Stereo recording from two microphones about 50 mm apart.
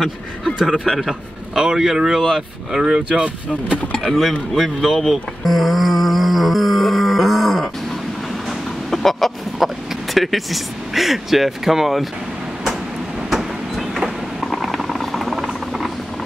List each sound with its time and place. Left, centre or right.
0.8 s speech: centre; by 3.8 s right
4.1 s speech: centre
5.4 s a sound: centre
8.5 s chicken: centre
9.6 s vehicle: centre
10.1 s speech: centre
13.3 s train: centre
14.4 s a sound: centre